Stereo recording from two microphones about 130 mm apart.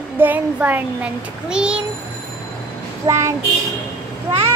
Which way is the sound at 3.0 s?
25° right (ahead or behind).